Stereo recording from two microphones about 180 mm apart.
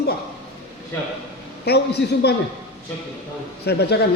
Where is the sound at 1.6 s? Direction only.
65° left (ahead or behind).